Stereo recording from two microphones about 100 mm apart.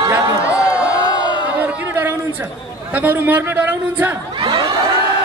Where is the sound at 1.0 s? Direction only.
50° left (ahead or behind).